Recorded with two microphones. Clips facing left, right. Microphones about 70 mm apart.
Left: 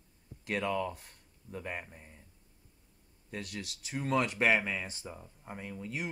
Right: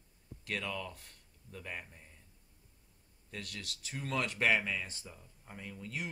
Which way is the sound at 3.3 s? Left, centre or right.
Centre.